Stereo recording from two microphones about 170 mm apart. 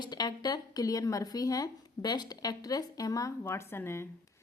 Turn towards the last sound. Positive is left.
turn(degrees=15)  # may be behind; listen again after turning